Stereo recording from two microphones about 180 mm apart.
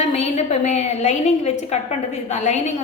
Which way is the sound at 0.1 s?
40° left (ahead or behind).